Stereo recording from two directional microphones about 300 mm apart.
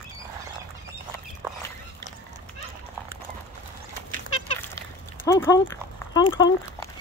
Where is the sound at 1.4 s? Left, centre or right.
Centre.